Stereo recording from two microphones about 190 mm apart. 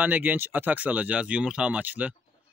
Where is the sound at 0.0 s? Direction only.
10° right (ahead or behind).